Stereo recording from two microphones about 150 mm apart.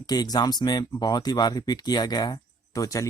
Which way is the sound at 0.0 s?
25° left (ahead or behind).